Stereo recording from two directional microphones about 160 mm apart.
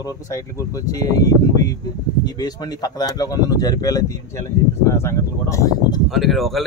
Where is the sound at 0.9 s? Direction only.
25° left (ahead or behind).